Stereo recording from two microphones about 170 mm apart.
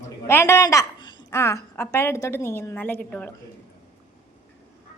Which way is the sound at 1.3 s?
15° left (ahead or behind).